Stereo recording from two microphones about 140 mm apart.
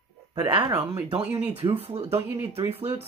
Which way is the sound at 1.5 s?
40° right (ahead or behind).